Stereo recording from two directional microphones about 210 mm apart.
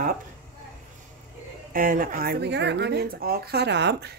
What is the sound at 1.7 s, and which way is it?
Speech, 40° right (ahead or behind).